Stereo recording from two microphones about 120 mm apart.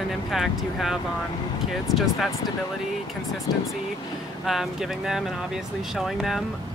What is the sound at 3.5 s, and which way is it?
Speech, 40° left (ahead or behind).